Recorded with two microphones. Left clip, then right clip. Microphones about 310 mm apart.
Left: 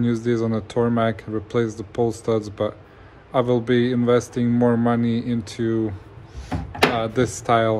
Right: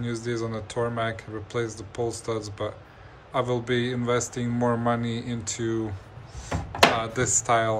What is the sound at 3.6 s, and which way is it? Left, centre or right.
Speech, centre.